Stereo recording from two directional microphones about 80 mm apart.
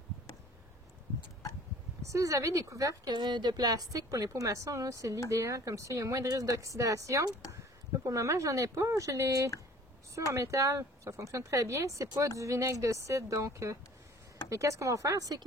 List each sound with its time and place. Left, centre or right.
2.0 s a woman's voice: right
3.2 s a woman's voice: right